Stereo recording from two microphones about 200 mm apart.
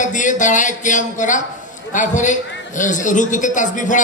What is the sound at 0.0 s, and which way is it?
A man's voice, 40° left (ahead or behind).